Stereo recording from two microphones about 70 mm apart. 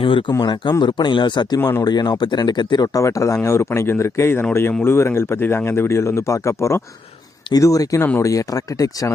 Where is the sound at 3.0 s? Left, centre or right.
Left.